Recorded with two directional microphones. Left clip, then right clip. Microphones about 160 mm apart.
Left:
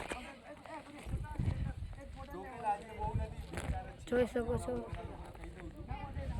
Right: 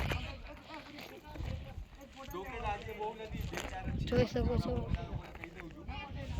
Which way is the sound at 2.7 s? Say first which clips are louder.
Left 4 dB; 50° left (ahead or behind).